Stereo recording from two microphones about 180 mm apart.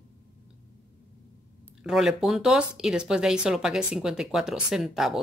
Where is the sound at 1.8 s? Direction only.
Centre (ahead or behind).